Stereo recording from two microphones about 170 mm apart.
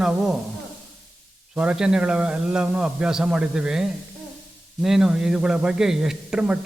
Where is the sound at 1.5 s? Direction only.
5° right (ahead or behind).